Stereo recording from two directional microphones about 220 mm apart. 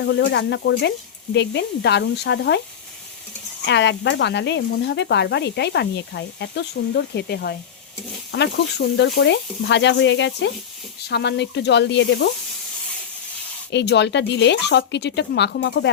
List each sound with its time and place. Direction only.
0.0 s speech: 50° left (ahead or behind)
3.7 s speech: 50° left (ahead or behind)
13.7 s speech: 50° left (ahead or behind)